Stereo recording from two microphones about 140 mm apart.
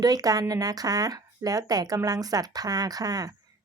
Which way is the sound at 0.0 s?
25° right (ahead or behind).